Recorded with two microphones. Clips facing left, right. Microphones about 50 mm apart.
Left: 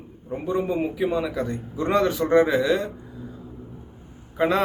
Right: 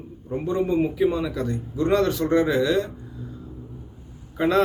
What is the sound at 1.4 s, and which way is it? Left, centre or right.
Speech, left.